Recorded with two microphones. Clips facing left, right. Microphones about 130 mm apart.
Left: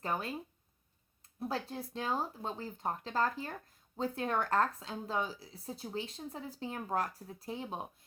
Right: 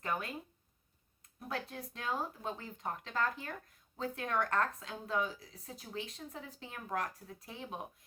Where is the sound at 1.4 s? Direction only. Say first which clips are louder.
Left 4 dB; 30° left (ahead or behind).